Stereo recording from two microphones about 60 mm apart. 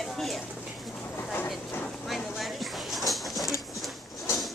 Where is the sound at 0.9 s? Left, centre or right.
Left.